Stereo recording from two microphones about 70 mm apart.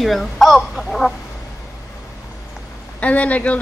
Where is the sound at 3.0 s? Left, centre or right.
Left.